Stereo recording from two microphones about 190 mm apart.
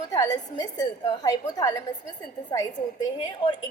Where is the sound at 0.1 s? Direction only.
20° left (ahead or behind).